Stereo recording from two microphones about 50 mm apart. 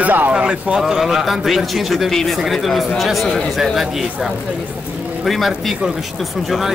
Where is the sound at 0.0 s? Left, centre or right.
Right.